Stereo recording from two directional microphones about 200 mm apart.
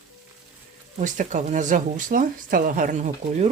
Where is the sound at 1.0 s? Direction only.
40° right (ahead or behind).